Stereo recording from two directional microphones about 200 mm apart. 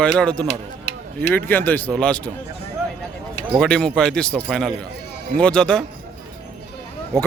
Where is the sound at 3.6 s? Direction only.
5° left (ahead or behind).